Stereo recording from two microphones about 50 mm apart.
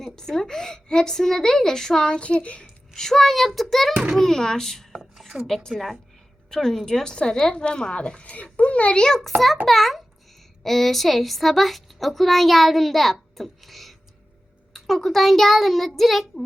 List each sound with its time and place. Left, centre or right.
0.0 s a woman's voice: centre
2.9 s a woman's voice: centre
4.9 s a sound: centre
5.5 s a woman's voice: centre
9.6 s a woman's voice: centre